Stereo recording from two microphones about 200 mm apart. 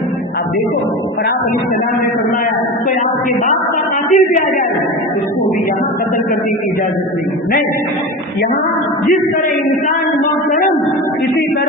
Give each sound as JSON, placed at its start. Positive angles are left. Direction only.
{"t": 4.1, "sound": "speech", "side_deg": 40}